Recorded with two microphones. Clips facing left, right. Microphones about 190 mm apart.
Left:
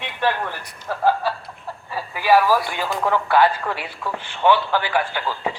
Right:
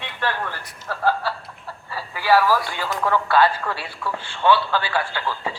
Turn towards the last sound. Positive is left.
turn(degrees=15)  # may be behind; listen again after turning